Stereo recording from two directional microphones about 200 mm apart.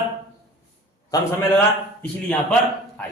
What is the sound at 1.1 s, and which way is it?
A man's voice, 10° left (ahead or behind).